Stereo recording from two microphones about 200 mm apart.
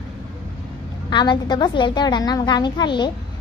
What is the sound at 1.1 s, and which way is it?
A woman's voice, 20° left (ahead or behind).